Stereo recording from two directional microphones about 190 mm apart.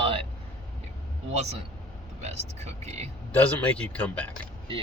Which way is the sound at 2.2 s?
35° right (ahead or behind).